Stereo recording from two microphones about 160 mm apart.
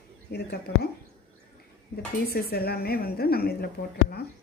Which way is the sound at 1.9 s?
75° left (ahead or behind).